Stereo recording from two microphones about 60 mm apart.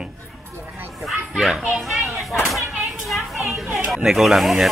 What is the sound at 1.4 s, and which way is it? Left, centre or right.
Speech, centre.